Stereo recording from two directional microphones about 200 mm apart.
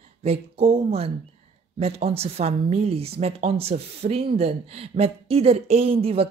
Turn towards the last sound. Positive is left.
turn(degrees=-30)  # may be behind; listen again after turning